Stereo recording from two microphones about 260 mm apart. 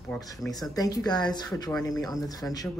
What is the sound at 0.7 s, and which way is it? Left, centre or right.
A woman's voice, centre.